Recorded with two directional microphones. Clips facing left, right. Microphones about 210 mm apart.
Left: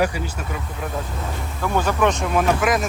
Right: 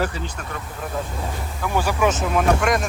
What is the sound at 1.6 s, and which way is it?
Speech, 10° right (ahead or behind).